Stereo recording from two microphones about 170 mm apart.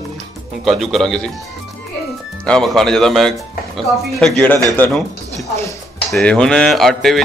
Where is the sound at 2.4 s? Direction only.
5° left (ahead or behind).